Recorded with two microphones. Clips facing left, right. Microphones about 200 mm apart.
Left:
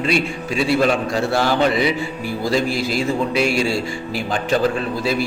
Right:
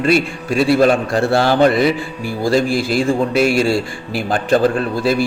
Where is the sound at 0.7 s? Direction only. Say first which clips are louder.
Right 3 dB; 50° right (ahead or behind).